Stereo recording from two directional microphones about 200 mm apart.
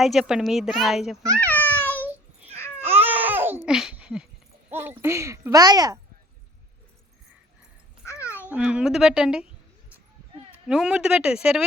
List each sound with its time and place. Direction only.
0.0 s a child's voice: centre (ahead or behind)
2.8 s babbling: 10° right (ahead or behind)
4.7 s speech: 10° right (ahead or behind)
8.0 s babbling: 15° left (ahead or behind)
8.5 s a child's voice: 5° right (ahead or behind)
10.7 s a child's voice: 5° right (ahead or behind)